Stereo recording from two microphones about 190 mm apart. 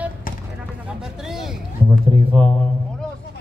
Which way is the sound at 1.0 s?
Centre (ahead or behind).